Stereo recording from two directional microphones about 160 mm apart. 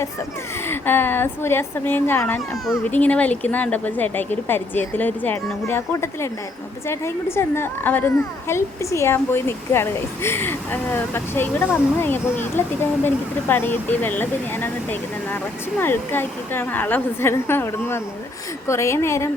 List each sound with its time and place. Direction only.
0.7 s a woman's voice: 10° left (ahead or behind)